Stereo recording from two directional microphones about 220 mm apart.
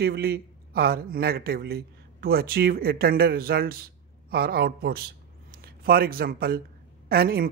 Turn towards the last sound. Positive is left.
turn(degrees=-45)  # may be behind; listen again after turning